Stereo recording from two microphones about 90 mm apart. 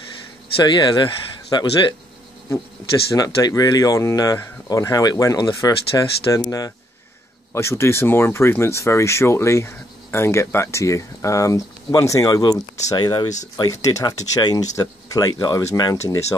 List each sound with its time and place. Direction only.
0.7 s speech: 55° left (ahead or behind)
3.2 s speech: 45° left (ahead or behind)
7.5 s speech: 30° left (ahead or behind); by 13.7 s 50° left (ahead or behind)
13.7 s speech: 35° left (ahead or behind)